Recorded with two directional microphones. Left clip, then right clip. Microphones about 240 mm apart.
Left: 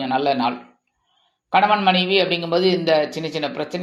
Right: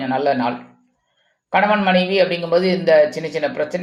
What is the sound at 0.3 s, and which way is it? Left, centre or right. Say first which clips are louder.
Speech: right 1 dB; left.